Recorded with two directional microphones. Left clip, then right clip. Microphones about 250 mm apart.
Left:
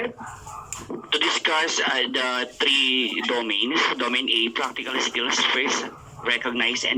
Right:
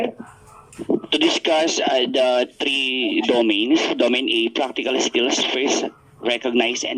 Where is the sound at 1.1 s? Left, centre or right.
Right.